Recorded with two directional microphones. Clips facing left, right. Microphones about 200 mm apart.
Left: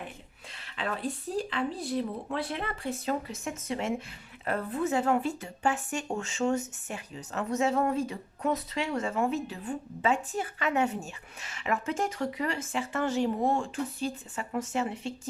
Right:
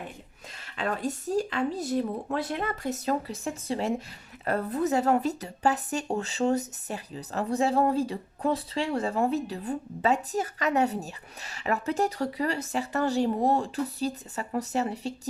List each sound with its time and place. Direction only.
0.6 s speech: 45° right (ahead or behind)